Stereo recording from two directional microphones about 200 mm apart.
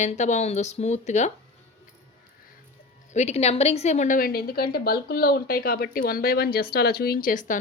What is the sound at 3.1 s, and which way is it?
A woman's voice, 35° left (ahead or behind).